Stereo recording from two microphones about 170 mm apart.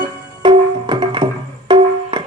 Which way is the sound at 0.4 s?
30° right (ahead or behind).